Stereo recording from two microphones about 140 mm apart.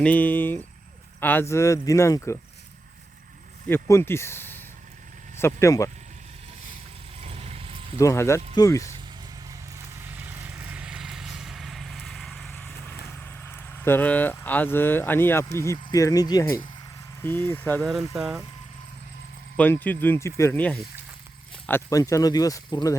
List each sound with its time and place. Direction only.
0.0 s speech: 10° left (ahead or behind)
3.7 s speech: 20° left (ahead or behind)
7.2 s vehicle: 45° right (ahead or behind)
7.9 s speech: 20° left (ahead or behind)
9.5 s vehicle: 20° right (ahead or behind); by 12.7 s 5° left (ahead or behind)
13.2 s speech: 15° left (ahead or behind)
17.2 s speech: 15° left (ahead or behind)
18.1 s speech: 5° right (ahead or behind)
19.5 s speech: 10° left (ahead or behind)
21.7 s speech: 20° left (ahead or behind)